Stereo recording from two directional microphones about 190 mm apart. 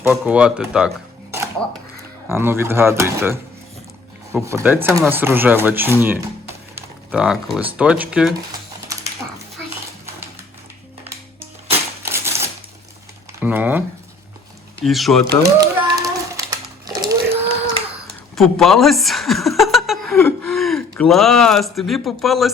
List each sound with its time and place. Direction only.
0.0 s speech: 5° right (ahead or behind)
6.7 s a sound: 5° right (ahead or behind)
7.8 s speech: 5° right (ahead or behind)
11.0 s typewriter: 10° right (ahead or behind)
13.4 s speech: 10° right (ahead or behind)
14.8 s speech: centre (ahead or behind)
15.4 s a sound: 20° right (ahead or behind)
18.3 s chuckle: centre (ahead or behind)
20.1 s speech: 5° left (ahead or behind)